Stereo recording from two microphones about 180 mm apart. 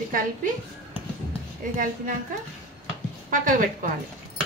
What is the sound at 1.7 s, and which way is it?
Speech, 50° right (ahead or behind).